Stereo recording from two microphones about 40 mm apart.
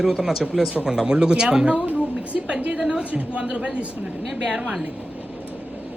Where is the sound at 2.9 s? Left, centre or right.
Right.